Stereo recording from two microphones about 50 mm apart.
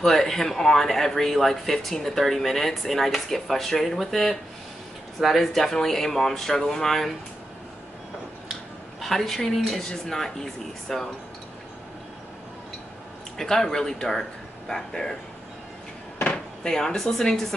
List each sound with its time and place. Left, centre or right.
0.0 s speech: centre
9.0 s speech: centre
13.4 s speech: centre
16.2 s drawer open or close: left
16.7 s speech: centre